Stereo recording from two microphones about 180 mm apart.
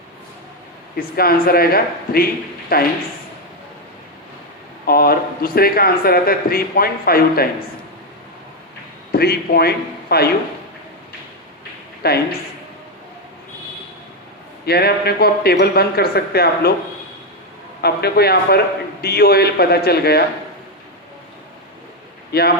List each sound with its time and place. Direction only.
0.9 s speech: 55° left (ahead or behind)
4.9 s speech: 55° left (ahead or behind)
9.1 s speech: 60° left (ahead or behind)
12.0 s speech: 60° left (ahead or behind)
14.6 s speech: 60° left (ahead or behind)
17.8 s speech: 60° left (ahead or behind)
22.3 s speech: 60° left (ahead or behind)